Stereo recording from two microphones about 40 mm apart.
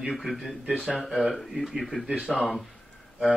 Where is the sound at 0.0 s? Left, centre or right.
Centre.